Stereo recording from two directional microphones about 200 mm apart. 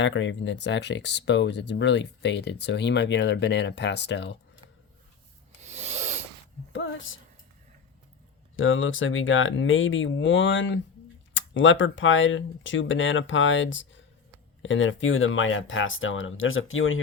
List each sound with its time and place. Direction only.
0.0 s speech: 70° left (ahead or behind)
5.6 s rub: 35° right (ahead or behind)
6.7 s a sound: 70° left (ahead or behind)
8.5 s speech: 80° left